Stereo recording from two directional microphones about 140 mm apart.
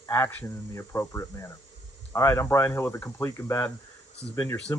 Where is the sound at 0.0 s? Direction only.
15° left (ahead or behind).